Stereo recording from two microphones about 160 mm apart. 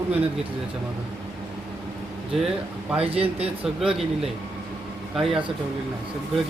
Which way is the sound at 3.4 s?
5° right (ahead or behind).